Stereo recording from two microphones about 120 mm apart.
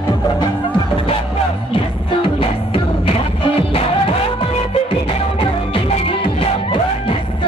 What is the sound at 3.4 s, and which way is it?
Music, 50° left (ahead or behind).